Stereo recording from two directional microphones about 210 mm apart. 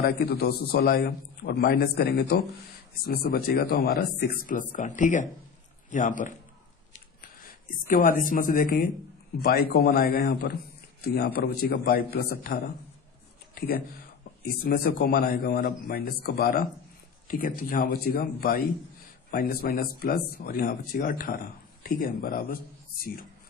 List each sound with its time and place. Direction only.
0.0 s a man's voice: 45° left (ahead or behind)
4.7 s a woman's voice: 35° left (ahead or behind)
7.7 s a woman's voice: 40° left (ahead or behind)